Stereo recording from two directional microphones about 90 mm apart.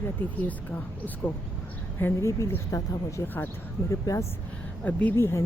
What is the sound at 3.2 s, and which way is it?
Speech, 20° left (ahead or behind).